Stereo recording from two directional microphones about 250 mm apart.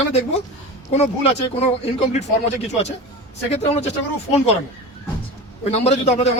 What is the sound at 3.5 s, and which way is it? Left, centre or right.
A man's voice, left.